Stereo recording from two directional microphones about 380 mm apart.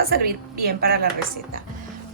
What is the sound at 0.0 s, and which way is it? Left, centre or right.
Speech, right.